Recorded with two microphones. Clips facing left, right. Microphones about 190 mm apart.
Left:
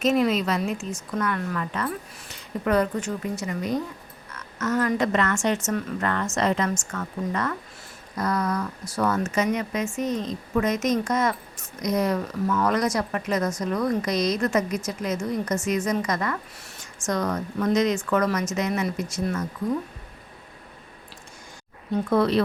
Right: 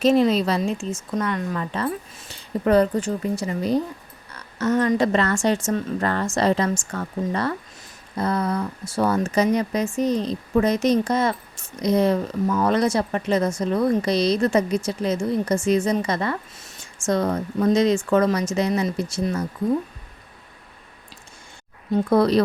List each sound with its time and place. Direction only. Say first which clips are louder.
0.0 s speech: right 4 dB; 30° right (ahead or behind)
22.1 s speech: right 3 dB; 40° right (ahead or behind)